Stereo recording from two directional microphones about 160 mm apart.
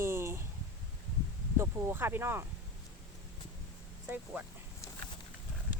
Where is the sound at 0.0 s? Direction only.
15° right (ahead or behind).